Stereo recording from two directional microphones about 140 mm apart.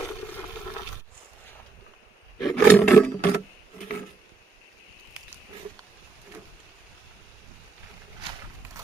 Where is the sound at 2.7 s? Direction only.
10° left (ahead or behind).